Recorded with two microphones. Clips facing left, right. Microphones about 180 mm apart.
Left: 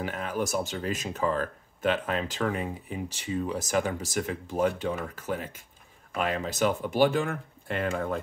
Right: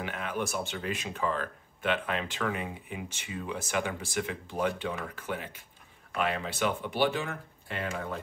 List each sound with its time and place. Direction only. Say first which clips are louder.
0.0 s speech: left 3 dB; 40° left (ahead or behind)